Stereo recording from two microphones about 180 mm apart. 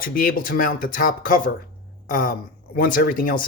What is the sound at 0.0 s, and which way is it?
A man's voice, 50° left (ahead or behind).